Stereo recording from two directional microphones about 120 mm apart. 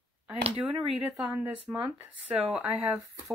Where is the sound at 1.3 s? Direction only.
15° right (ahead or behind).